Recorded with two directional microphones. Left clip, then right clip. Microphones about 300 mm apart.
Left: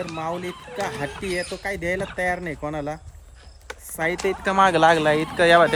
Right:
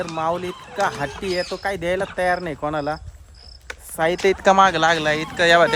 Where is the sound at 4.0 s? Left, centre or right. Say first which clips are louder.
Right 4 dB; centre.